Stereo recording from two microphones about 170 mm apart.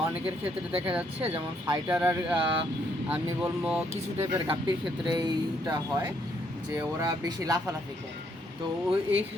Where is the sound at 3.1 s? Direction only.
5° right (ahead or behind).